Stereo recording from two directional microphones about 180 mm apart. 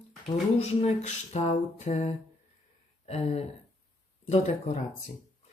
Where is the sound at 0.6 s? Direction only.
35° left (ahead or behind).